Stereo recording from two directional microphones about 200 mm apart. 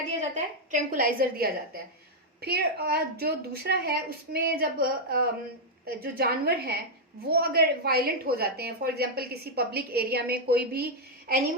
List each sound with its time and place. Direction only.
0.2 s a woman's voice: 40° right (ahead or behind)